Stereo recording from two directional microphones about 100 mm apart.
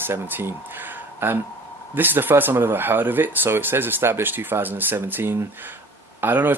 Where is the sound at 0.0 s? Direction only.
20° right (ahead or behind).